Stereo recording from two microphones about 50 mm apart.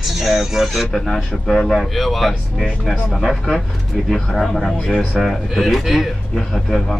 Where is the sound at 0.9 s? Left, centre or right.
Centre.